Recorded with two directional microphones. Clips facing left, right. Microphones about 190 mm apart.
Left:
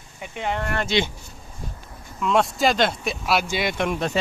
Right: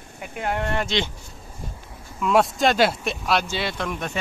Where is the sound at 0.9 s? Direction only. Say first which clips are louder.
Left 6 dB; 5° left (ahead or behind).